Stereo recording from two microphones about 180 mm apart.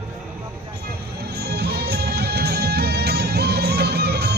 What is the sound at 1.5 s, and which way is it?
Music, 65° right (ahead or behind).